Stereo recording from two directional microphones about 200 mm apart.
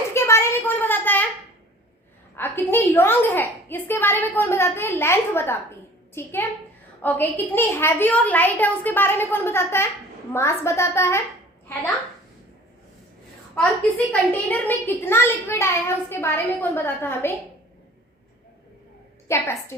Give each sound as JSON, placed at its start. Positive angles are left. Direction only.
{"t": 0.1, "sound": "a sound", "side_deg": 15}
{"t": 2.3, "sound": "a woman's voice", "side_deg": 10}
{"t": 13.6, "sound": "a woman's voice", "side_deg": 5}
{"t": 19.3, "sound": "a woman's voice", "side_deg": 15}